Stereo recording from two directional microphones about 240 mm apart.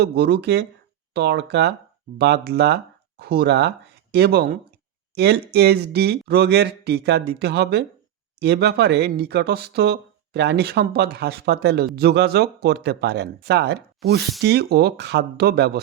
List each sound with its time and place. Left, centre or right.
0.0 s speech: right